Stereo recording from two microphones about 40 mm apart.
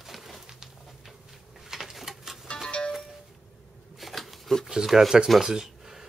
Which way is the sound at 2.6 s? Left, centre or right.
Left.